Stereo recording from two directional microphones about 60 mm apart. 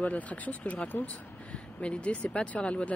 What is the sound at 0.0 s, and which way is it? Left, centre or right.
Speech, left.